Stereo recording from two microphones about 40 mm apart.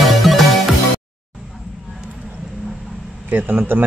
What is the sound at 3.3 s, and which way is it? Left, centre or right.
Speech, right.